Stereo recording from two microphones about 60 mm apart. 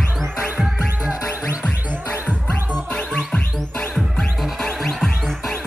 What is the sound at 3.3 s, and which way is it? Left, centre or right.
Music, left.